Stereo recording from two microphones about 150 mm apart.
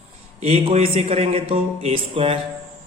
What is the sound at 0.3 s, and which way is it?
A man's voice, 45° right (ahead or behind).